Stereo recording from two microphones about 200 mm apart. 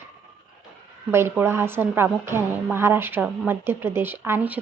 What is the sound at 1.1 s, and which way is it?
A woman's voice, 10° right (ahead or behind).